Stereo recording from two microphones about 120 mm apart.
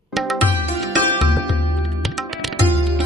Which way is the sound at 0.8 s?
Centre (ahead or behind).